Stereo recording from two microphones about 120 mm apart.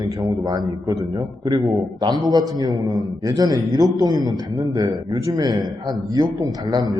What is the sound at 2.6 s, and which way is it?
Speech, 35° right (ahead or behind).